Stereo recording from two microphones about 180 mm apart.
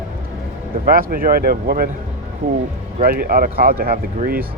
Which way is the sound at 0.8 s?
50° right (ahead or behind).